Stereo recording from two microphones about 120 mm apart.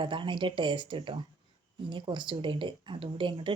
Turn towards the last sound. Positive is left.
turn(degrees=-45)  # may be behind; listen again after turning